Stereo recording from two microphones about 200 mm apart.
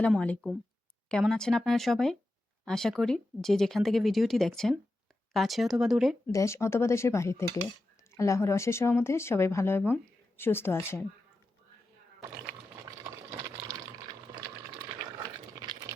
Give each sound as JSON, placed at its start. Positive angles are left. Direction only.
{"t": 0.0, "sound": "speech", "side_deg": 5}
{"t": 6.3, "sound": "speech", "side_deg": 15}
{"t": 15.2, "sound": "a sound", "side_deg": -20}